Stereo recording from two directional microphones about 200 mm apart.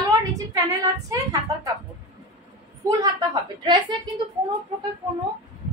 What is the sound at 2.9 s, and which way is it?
A woman's voice, 20° right (ahead or behind).